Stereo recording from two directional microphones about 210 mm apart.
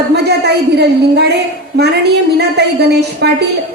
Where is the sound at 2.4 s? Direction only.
50° right (ahead or behind).